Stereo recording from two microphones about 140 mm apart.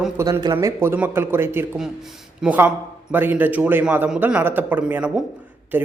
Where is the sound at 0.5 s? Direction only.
15° right (ahead or behind).